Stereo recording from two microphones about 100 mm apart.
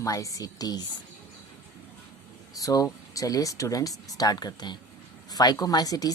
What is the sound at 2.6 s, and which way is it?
Speech, 35° left (ahead or behind).